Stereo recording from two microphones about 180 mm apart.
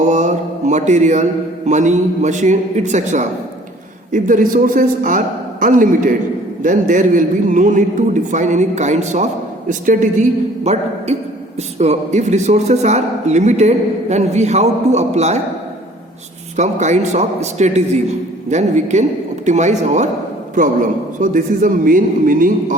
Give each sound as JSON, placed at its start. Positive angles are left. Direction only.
{"t": 0.0, "sound": "a man's voice", "side_deg": -40}
{"t": 16.6, "sound": "a man's voice", "side_deg": -40}